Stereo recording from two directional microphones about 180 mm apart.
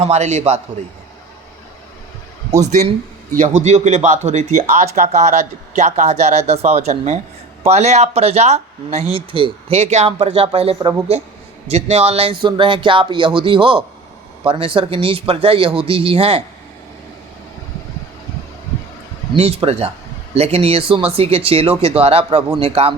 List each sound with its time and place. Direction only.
0.0 s speech: 40° right (ahead or behind)
3.3 s speech: 40° right (ahead or behind)
19.3 s speech: 30° right (ahead or behind)